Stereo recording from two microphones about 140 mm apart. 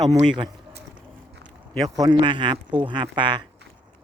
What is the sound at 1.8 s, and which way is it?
Speech, 25° right (ahead or behind).